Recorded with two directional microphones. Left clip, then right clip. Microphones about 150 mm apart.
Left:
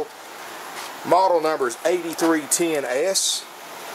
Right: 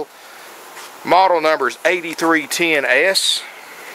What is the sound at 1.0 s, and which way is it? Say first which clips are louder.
Speech: right 5 dB; 30° right (ahead or behind).